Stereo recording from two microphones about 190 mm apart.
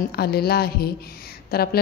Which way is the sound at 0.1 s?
55° left (ahead or behind).